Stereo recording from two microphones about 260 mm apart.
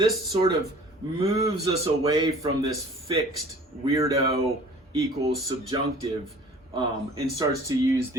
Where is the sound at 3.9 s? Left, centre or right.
Centre.